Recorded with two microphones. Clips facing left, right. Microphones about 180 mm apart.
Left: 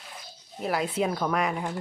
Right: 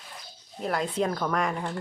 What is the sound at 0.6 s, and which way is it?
Speech, 5° left (ahead or behind).